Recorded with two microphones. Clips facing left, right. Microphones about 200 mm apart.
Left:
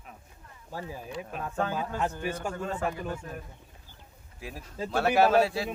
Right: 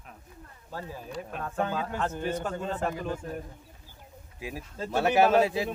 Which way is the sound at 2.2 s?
10° left (ahead or behind).